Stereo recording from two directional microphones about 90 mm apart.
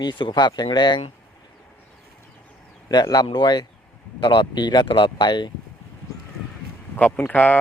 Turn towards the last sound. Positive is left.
turn(degrees=20)  # may be behind; listen again after turning